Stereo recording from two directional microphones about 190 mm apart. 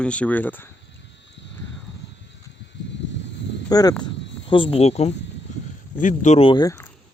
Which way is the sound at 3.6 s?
20° left (ahead or behind).